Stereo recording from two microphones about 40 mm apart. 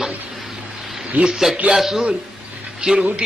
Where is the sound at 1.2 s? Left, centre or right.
Right.